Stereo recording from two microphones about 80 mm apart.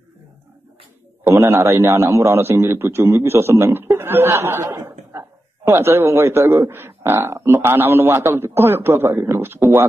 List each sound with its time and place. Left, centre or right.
1.2 s a man's voice: right